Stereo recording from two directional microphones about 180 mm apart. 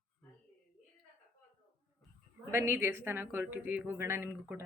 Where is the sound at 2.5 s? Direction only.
15° right (ahead or behind).